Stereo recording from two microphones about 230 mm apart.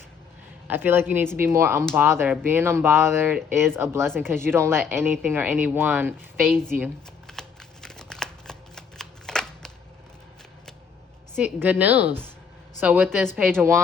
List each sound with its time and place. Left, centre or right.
0.7 s speech: centre
6.7 s shuffling cards: centre
11.3 s a woman's voice: centre